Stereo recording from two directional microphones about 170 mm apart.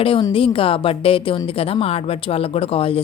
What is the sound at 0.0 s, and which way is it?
A woman's voice, 30° left (ahead or behind).